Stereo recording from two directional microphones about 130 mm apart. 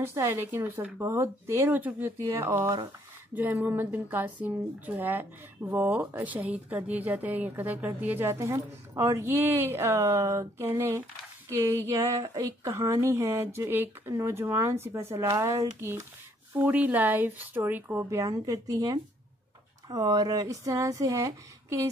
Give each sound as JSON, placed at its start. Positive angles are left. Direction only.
{"t": 0.0, "sound": "a woman's voice", "side_deg": -20}